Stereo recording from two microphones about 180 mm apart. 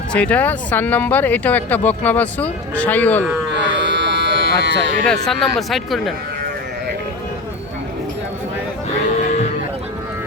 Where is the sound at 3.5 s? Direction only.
85° right.